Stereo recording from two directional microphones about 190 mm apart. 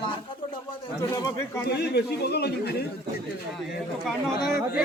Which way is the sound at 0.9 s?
15° left (ahead or behind).